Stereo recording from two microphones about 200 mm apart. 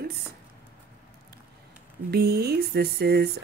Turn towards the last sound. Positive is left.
turn(degrees=-50)  # may be behind; listen again after turning